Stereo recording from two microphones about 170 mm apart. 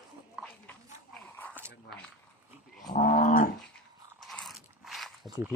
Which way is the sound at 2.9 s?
50° left (ahead or behind).